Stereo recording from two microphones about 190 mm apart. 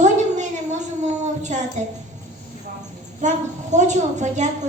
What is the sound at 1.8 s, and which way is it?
Speech, 40° right (ahead or behind).